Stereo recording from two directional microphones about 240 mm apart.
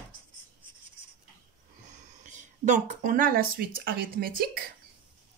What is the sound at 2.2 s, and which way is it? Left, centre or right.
Speech, right.